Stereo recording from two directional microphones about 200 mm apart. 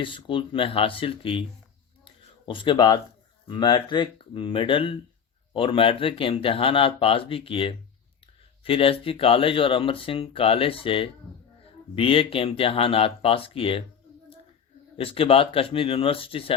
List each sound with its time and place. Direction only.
0.0 s speech: 25° left (ahead or behind)
2.5 s speech: 25° left (ahead or behind)
14.9 s speech: 25° left (ahead or behind)